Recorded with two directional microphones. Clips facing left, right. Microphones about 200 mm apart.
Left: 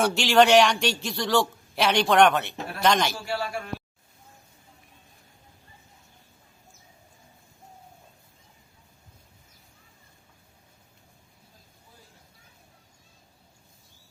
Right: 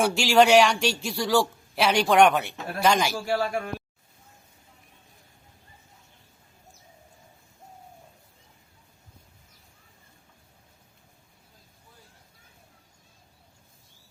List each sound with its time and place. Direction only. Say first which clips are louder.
0.0 s a man's voice: even; 5° right (ahead or behind)
3.2 s speech: right 4 dB; 45° right (ahead or behind)